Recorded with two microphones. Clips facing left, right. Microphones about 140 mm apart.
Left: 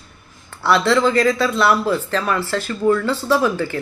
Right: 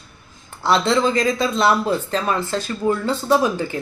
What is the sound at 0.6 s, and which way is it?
Speech, 20° right (ahead or behind).